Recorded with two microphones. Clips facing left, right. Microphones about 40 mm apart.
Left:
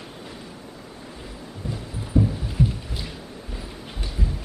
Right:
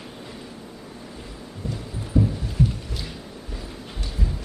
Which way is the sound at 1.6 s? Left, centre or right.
Left.